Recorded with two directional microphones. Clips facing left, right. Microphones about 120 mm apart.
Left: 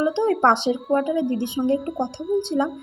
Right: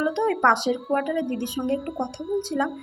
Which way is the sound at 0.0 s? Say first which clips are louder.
Left 3 dB; 30° left (ahead or behind).